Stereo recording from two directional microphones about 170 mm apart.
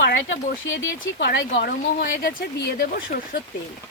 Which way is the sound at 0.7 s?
90° left.